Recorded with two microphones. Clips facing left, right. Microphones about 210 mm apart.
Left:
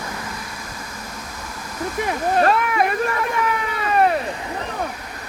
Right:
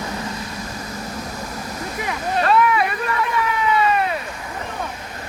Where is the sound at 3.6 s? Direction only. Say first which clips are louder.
Right 8 dB; 50° left (ahead or behind).